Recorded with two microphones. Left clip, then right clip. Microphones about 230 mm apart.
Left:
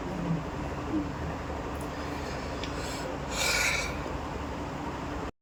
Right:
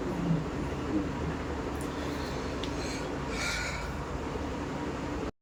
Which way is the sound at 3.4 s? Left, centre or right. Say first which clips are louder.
Left 8 dB; left.